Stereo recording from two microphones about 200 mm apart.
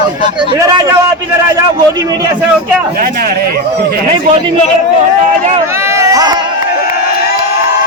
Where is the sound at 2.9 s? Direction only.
50° right (ahead or behind).